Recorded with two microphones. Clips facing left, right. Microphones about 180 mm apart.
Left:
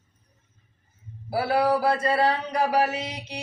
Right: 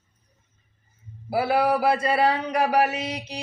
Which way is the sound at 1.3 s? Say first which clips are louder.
Right 1 dB; 15° right (ahead or behind).